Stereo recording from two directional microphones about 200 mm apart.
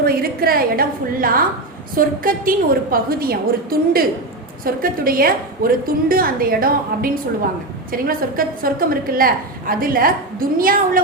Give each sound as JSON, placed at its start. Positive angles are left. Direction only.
{"t": 0.0, "sound": "a woman's voice", "side_deg": -50}